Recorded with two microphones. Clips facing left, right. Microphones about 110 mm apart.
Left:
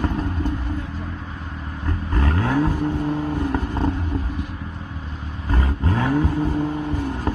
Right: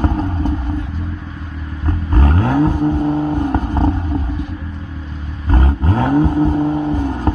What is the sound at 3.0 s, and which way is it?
Vehicle, 25° right (ahead or behind).